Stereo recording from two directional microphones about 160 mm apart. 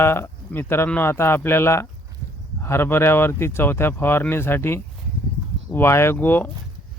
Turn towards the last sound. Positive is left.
turn(degrees=10)  # may be behind; listen again after turning